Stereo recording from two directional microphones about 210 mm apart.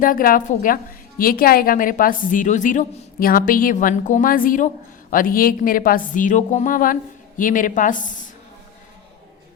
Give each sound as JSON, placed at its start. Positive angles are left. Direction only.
{"t": 0.0, "sound": "a woman's voice", "side_deg": 40}